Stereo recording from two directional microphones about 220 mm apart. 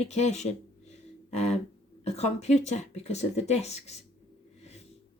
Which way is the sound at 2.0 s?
30° left (ahead or behind).